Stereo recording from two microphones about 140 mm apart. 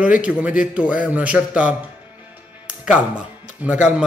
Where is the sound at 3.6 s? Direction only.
10° right (ahead or behind).